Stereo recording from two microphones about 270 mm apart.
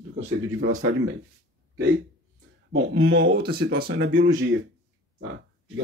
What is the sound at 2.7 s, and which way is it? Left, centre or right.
Speech, right.